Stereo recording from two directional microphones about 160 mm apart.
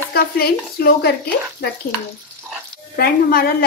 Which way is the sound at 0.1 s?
75° left (ahead or behind).